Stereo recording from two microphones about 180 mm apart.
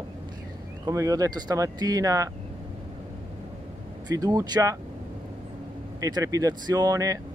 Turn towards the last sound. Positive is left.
turn(degrees=-20)  # may be behind; listen again after turning